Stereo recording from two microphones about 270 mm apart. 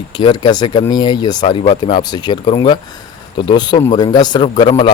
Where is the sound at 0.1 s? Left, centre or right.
Centre.